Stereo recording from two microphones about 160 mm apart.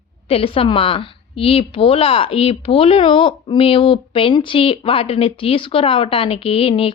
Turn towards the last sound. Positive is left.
turn(degrees=35)  # may be behind; listen again after turning